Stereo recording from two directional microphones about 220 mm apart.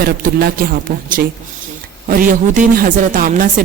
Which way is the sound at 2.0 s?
40° right (ahead or behind).